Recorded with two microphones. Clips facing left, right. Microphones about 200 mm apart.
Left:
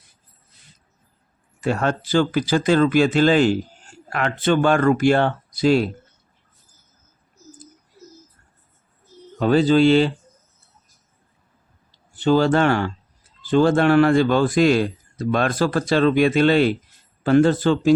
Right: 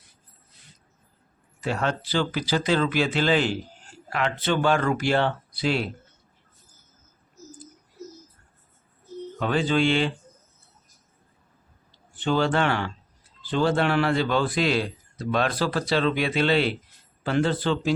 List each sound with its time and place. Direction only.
1.6 s speech: 50° left (ahead or behind)
9.4 s speech: 40° left (ahead or behind)
12.1 s speech: 40° left (ahead or behind)